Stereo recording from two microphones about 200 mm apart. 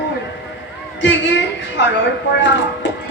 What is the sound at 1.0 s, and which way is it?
Speech, 65° left (ahead or behind).